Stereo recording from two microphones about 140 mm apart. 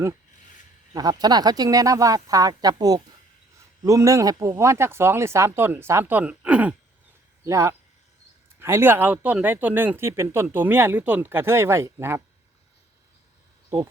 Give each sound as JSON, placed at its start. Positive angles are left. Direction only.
{"t": 0.9, "sound": "speech", "side_deg": -30}
{"t": 7.4, "sound": "speech", "side_deg": -20}